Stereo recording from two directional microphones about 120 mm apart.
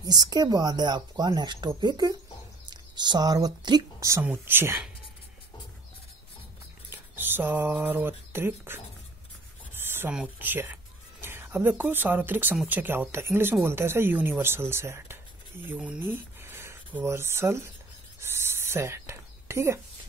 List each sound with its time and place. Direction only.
0.0 s speech: 35° right (ahead or behind)
4.1 s speech: 20° right (ahead or behind)
6.9 s speech: 15° right (ahead or behind)
9.8 s a sound: 20° right (ahead or behind)
11.8 s speech: 15° right (ahead or behind)
18.2 s a sound: 20° right (ahead or behind)